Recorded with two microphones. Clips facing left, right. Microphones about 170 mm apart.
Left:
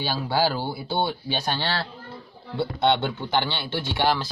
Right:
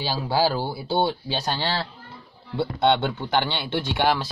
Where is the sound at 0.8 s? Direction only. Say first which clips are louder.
Right 4 dB; 10° right (ahead or behind).